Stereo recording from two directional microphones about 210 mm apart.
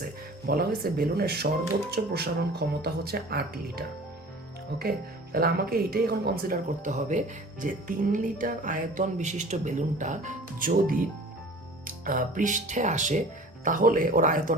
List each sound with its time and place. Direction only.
0.0 s speech: 45° right (ahead or behind)